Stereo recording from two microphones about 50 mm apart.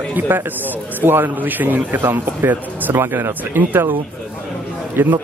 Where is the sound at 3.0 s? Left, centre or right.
Right.